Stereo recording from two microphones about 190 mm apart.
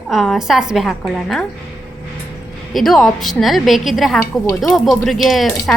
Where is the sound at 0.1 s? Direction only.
Centre (ahead or behind).